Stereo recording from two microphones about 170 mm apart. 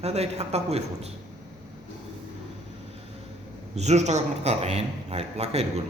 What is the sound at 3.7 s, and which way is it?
A man's voice, 40° right (ahead or behind).